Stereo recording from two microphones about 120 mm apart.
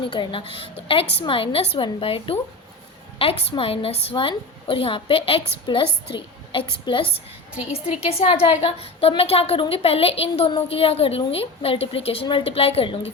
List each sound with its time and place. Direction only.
0.0 s a woman's voice: 45° left (ahead or behind)